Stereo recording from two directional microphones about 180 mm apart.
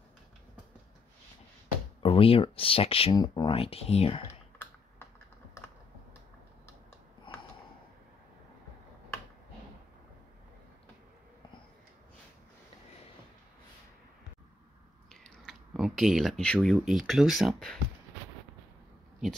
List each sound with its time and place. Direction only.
2.0 s speech: 30° left (ahead or behind)
15.0 s speech: centre (ahead or behind)